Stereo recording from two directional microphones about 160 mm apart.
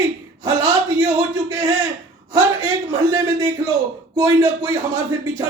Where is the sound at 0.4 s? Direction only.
20° right (ahead or behind).